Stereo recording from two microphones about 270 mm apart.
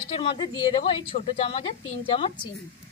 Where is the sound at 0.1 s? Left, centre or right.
Centre.